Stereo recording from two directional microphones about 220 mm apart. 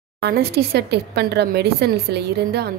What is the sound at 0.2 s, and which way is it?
A woman's voice, 45° right (ahead or behind).